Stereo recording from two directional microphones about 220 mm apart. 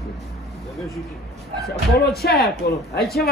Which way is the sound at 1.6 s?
45° left (ahead or behind).